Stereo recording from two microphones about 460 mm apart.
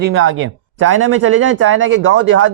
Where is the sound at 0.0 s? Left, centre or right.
Right.